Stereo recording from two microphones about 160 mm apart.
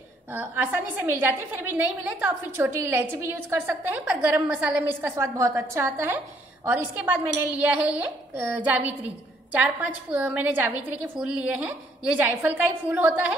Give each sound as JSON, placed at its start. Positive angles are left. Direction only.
{"t": 0.3, "sound": "a woman's voice", "side_deg": -10}